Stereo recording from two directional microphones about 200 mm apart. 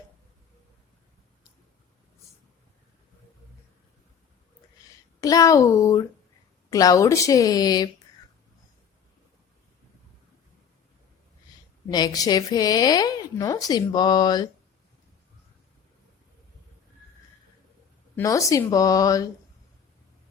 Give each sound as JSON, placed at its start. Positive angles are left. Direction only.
{"t": 5.2, "sound": "speech", "side_deg": 15}
{"t": 11.9, "sound": "a woman's voice", "side_deg": 20}
{"t": 18.2, "sound": "speech", "side_deg": 15}